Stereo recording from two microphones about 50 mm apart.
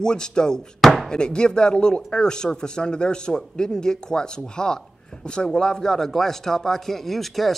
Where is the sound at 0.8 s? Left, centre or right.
Centre.